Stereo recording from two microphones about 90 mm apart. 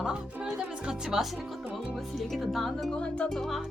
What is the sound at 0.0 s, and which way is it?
Music, 5° right (ahead or behind).